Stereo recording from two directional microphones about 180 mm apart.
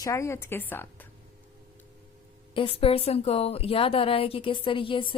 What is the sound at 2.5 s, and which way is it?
A woman's voice, 30° left (ahead or behind).